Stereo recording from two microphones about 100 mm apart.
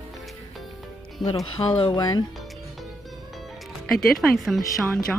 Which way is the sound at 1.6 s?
35° left (ahead or behind).